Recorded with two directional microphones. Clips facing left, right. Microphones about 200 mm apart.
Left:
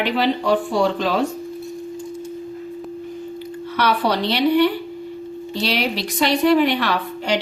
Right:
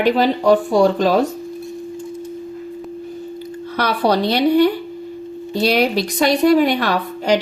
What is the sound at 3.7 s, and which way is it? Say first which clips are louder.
A woman's voice: right 3 dB; 40° right (ahead or behind).